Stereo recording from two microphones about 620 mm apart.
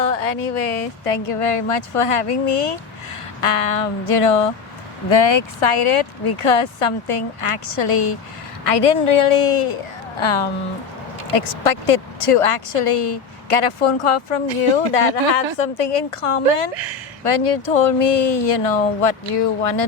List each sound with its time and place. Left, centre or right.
0.0 s speech: left
5.0 s speech: left